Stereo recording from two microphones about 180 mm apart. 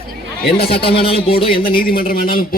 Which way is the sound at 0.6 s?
60° left (ahead or behind).